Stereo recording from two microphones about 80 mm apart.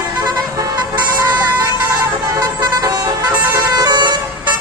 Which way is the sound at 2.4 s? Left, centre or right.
Right.